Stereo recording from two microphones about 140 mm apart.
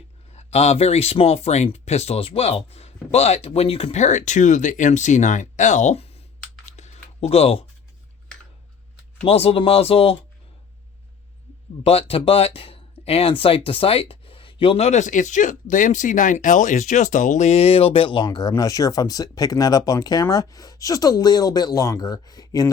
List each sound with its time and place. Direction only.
0.3 s speech: 50° left (ahead or behind)
6.7 s a sound: 50° left (ahead or behind)
9.2 s speech: 45° left (ahead or behind)
11.8 s speech: 45° left (ahead or behind); by 22.7 s 25° left (ahead or behind)